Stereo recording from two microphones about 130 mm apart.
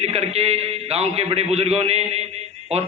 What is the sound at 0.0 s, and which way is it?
A man's voice, 55° right (ahead or behind).